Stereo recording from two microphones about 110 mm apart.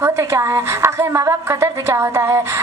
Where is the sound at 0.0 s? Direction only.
25° right (ahead or behind).